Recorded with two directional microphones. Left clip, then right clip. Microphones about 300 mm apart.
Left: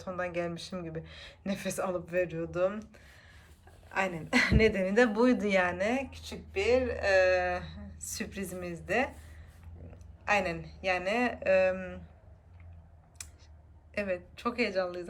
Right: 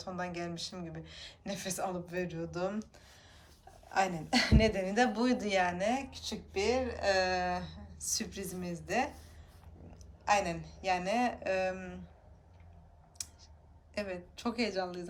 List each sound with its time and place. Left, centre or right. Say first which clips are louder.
0.0 s speech: left 5 dB; centre
10.2 s speech: left 1 dB; centre
13.2 s clicking: right 3 dB; centre
13.9 s speech: left 5 dB; centre